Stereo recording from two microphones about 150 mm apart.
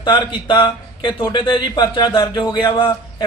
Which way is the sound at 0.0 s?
35° left (ahead or behind).